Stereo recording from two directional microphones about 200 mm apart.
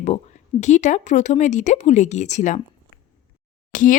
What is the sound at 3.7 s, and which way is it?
Speech, 40° left (ahead or behind).